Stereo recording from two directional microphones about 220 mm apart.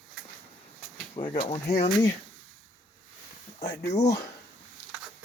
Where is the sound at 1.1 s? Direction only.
25° left (ahead or behind).